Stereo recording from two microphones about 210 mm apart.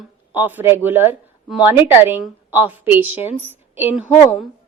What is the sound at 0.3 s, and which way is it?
A woman's voice, 10° right (ahead or behind).